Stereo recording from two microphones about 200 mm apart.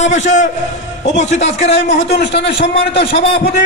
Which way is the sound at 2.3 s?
60° left (ahead or behind).